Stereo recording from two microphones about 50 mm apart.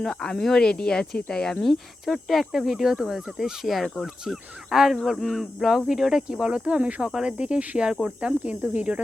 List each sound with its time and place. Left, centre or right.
0.0 s speech: centre
5.9 s speech: centre; by 9.0 s right